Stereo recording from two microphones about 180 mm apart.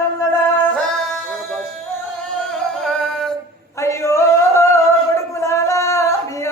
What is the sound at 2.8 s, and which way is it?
Music, 5° left (ahead or behind).